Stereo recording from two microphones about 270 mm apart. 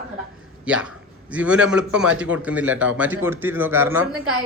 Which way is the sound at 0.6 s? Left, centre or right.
Centre.